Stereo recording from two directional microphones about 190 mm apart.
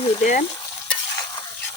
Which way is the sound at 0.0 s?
40° left (ahead or behind).